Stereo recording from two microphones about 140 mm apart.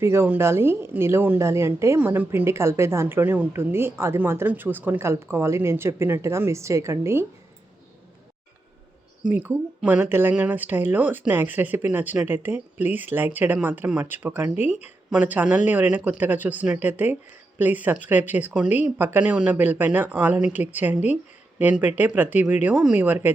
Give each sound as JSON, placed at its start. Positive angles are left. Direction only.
{"t": 0.0, "sound": "a woman's voice", "side_deg": -20}
{"t": 9.2, "sound": "a woman's voice", "side_deg": -10}